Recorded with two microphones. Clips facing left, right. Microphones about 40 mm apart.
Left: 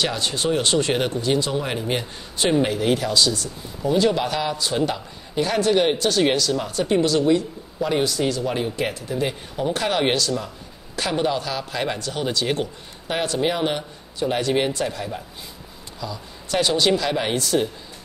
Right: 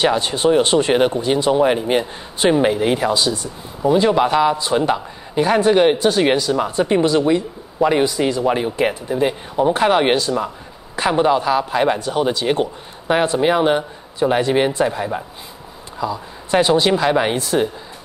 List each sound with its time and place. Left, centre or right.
0.0 s speech: right